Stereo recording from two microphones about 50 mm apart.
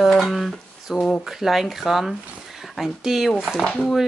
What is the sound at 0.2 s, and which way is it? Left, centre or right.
Speech, centre.